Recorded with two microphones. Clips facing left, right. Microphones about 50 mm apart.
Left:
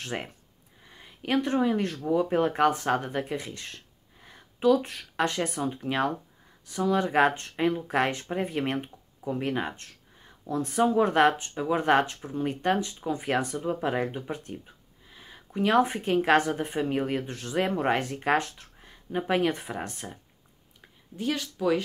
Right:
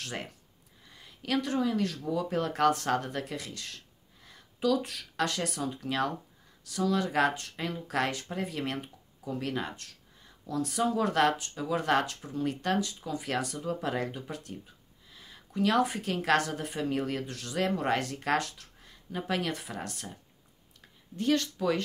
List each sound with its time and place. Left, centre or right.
0.0 s speech: left
20.8 s a woman's voice: centre